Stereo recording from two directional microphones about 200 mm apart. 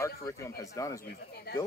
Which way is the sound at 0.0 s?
15° left (ahead or behind).